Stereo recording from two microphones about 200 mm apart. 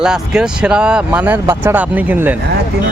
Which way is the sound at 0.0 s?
5° right (ahead or behind).